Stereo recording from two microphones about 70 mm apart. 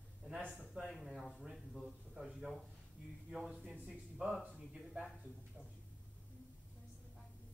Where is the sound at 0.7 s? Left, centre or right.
Centre.